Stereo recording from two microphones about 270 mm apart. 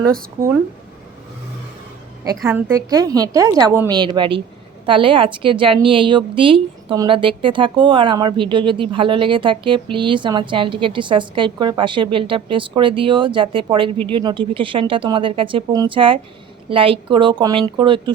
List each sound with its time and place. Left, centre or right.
2.2 s a woman's voice: centre